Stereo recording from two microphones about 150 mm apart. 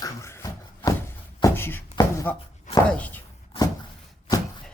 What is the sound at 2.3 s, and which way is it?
Speech, 10° left (ahead or behind).